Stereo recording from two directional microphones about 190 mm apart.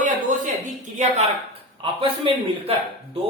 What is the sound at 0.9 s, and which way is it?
A woman's voice, 35° right (ahead or behind).